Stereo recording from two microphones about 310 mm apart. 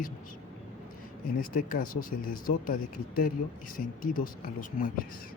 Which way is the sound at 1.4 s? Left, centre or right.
Left.